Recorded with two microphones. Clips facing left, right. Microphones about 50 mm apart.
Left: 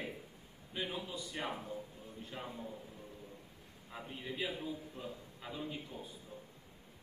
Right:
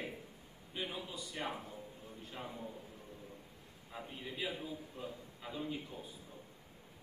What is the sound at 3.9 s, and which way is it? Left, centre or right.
A man's voice, centre.